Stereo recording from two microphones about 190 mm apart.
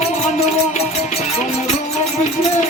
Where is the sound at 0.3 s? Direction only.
35° left (ahead or behind).